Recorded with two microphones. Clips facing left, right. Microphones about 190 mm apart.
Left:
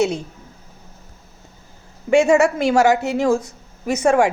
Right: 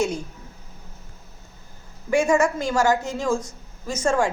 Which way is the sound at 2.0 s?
75° left (ahead or behind).